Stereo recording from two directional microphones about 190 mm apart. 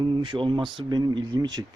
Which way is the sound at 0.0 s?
25° right (ahead or behind).